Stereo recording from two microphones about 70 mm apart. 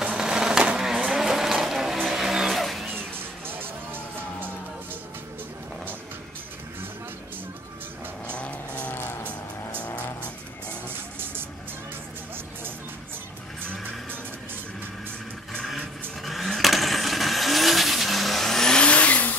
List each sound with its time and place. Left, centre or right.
0.0 s a sound: centre
1.1 s vehicle: centre
2.0 s music: centre
3.4 s music: right
8.4 s vehicle: centre
15.5 s vehicle: centre